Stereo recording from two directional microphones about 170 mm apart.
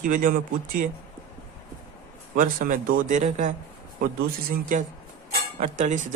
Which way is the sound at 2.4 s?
55° right (ahead or behind).